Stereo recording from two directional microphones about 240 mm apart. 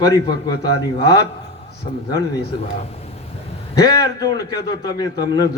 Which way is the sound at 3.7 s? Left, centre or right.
Centre.